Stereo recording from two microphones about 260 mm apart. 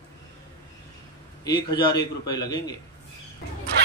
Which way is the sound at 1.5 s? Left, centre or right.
Centre.